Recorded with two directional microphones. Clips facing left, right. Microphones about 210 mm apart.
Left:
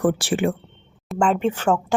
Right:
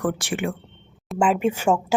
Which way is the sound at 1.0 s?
5° right (ahead or behind).